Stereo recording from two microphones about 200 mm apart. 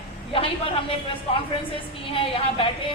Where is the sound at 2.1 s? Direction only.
25° left (ahead or behind).